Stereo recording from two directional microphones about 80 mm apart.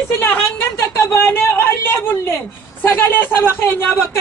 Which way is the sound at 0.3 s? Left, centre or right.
Left.